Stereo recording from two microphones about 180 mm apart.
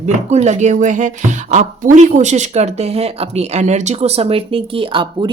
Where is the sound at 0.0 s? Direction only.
40° right (ahead or behind).